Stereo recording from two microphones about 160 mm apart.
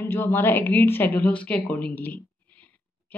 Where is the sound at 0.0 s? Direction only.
15° left (ahead or behind).